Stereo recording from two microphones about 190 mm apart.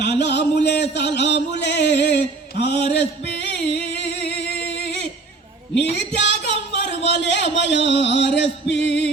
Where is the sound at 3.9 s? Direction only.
65° left (ahead or behind).